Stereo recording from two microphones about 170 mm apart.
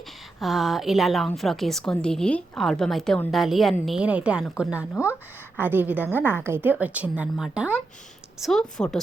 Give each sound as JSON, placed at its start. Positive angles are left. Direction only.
{"t": 0.3, "sound": "a woman's voice", "side_deg": 0}